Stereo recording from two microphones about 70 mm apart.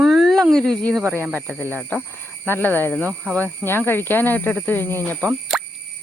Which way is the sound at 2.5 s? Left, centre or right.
Left.